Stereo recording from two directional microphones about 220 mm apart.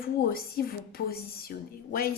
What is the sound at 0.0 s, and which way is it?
A woman's voice, 45° left (ahead or behind).